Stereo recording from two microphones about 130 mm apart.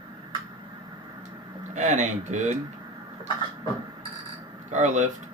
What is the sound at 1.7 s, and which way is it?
Speech, 65° right (ahead or behind).